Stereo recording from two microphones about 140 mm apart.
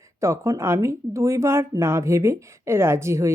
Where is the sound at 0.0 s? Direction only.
20° right (ahead or behind).